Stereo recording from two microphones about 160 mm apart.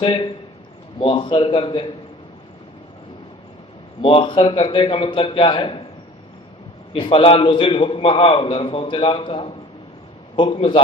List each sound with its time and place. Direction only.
0.0 s a man's voice: 30° left (ahead or behind)
4.0 s a man's voice: 30° left (ahead or behind)
6.9 s a man's voice: 35° left (ahead or behind)